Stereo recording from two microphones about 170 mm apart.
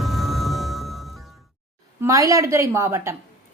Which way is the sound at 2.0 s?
20° right (ahead or behind).